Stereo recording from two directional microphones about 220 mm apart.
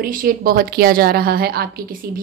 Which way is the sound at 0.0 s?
40° right (ahead or behind).